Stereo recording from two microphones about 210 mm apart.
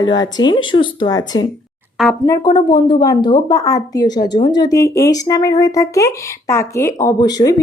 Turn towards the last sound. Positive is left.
turn(degrees=20)  # may be behind; listen again after turning